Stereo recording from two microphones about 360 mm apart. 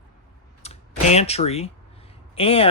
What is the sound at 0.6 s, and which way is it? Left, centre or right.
Computer keyboard, centre.